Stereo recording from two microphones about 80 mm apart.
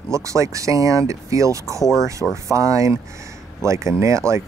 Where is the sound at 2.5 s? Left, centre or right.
Right.